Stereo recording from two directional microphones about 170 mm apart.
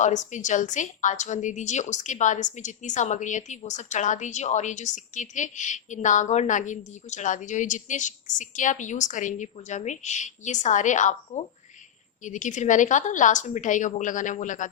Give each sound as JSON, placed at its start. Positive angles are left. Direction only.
{"t": 0.0, "sound": "a woman's voice", "side_deg": 45}
{"t": 12.2, "sound": "a woman's voice", "side_deg": 45}